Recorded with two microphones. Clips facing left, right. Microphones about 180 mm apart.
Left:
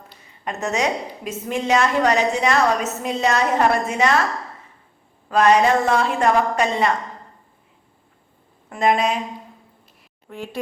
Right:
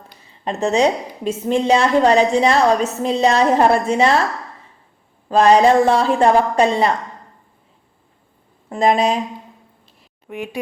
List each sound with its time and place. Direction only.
0.4 s a woman's voice: 30° right (ahead or behind)
5.3 s a woman's voice: 30° right (ahead or behind)
8.7 s a woman's voice: 30° right (ahead or behind)
10.2 s speech: 15° right (ahead or behind)